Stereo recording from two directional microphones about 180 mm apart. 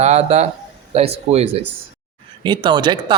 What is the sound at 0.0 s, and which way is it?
Speech, 35° right (ahead or behind).